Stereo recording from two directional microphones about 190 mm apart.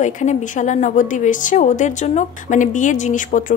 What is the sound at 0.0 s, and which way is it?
A woman's voice, 40° left (ahead or behind).